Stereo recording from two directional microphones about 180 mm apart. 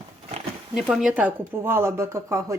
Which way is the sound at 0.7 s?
5° right (ahead or behind).